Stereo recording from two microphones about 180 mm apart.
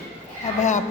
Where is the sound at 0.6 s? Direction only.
40° left (ahead or behind).